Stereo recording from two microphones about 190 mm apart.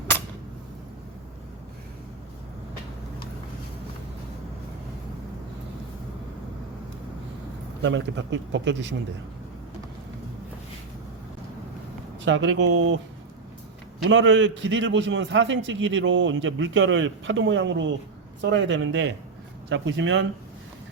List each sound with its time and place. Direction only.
7.8 s speech: 75° right (ahead or behind)
12.2 s speech: 80° right
14.0 s a man's voice: 80° right
19.7 s a man's voice: 80° right